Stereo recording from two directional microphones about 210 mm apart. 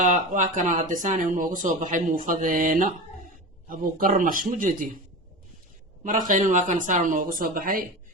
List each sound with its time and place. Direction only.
0.0 s speech: 35° right (ahead or behind)
6.1 s speech: 40° right (ahead or behind)